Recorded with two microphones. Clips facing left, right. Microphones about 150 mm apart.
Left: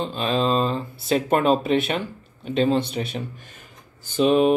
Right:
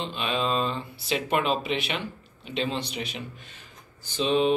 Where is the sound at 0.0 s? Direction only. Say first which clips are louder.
Left 6 dB; 40° left (ahead or behind).